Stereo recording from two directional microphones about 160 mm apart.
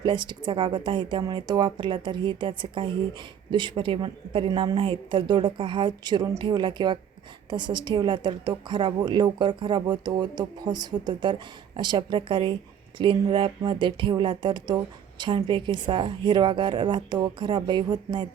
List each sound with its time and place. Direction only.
0.0 s a woman's voice: 30° right (ahead or behind)